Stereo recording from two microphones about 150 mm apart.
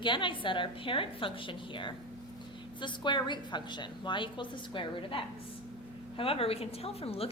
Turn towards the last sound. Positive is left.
turn(degrees=40)  # may be behind; listen again after turning